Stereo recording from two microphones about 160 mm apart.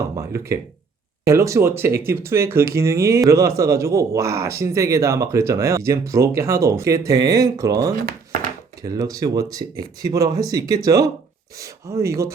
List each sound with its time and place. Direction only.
0.2 s speech: 20° right (ahead or behind)